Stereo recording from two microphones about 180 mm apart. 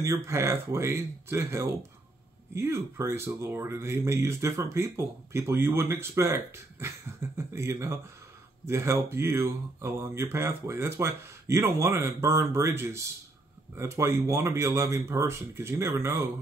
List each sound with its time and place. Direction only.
0.0 s speech: 15° right (ahead or behind)